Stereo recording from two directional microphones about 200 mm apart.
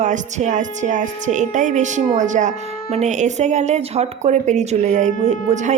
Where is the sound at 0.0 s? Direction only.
35° right (ahead or behind).